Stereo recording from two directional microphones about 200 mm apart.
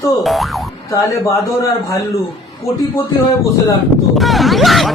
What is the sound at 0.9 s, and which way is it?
A man's voice, 15° left (ahead or behind).